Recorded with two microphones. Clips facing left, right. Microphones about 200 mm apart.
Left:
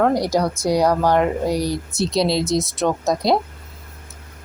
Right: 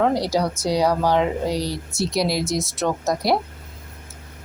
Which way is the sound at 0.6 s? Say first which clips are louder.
Left 3 dB; 10° left (ahead or behind).